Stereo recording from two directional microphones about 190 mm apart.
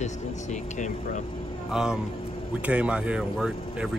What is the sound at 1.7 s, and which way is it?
Speech, 5° right (ahead or behind).